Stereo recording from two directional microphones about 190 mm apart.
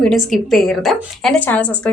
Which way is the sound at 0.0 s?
Centre (ahead or behind).